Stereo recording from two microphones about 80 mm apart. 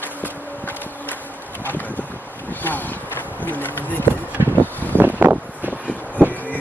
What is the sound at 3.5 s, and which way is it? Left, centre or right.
Speech, left.